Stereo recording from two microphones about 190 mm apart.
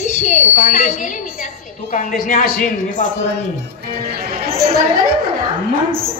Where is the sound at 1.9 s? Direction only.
45° left (ahead or behind).